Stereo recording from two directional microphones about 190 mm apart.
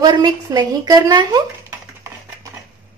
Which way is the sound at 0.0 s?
20° right (ahead or behind).